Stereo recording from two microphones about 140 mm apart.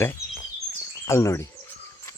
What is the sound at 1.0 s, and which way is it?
Speech, 20° left (ahead or behind).